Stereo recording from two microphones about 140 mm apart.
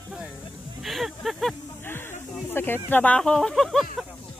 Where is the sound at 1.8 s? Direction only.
15° left (ahead or behind).